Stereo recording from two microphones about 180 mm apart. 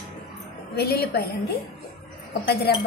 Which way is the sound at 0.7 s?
60° left (ahead or behind).